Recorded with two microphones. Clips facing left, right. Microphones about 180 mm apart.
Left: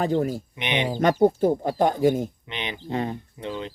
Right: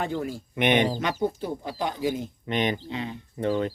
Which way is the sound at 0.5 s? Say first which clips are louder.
Right 11 dB; 50° right (ahead or behind).